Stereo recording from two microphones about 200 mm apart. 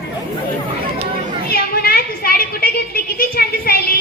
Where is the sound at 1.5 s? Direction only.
50° left (ahead or behind).